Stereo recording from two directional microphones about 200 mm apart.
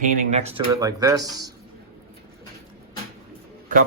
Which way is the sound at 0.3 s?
30° right (ahead or behind).